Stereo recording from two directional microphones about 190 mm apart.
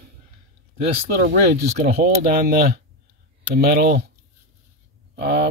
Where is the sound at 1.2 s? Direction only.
60° right (ahead or behind).